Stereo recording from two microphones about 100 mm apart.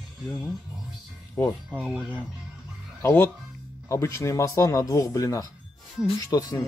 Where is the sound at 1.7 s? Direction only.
5° right (ahead or behind).